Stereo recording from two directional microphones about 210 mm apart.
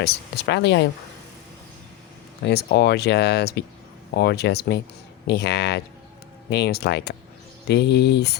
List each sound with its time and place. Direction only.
0.0 s speech: 50° left (ahead or behind)
2.4 s speech: 50° left (ahead or behind)